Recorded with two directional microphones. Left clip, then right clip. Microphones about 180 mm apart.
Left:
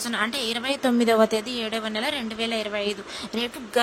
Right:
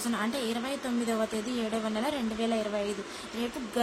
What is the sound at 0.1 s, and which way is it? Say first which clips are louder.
A woman's voice: left 6 dB; 50° left (ahead or behind).